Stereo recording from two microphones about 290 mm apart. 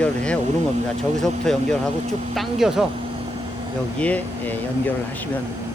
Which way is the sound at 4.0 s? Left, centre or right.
Centre.